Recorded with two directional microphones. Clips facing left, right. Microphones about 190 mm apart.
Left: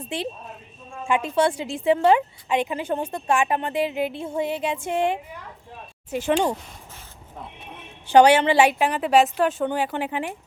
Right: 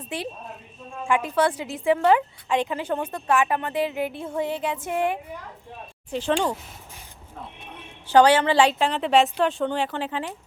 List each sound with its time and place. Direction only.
1.0 s a woman's voice: 25° left (ahead or behind)
3.2 s a woman's voice: 25° left (ahead or behind)
6.1 s a woman's voice: 10° left (ahead or behind)
8.1 s a woman's voice: 15° left (ahead or behind)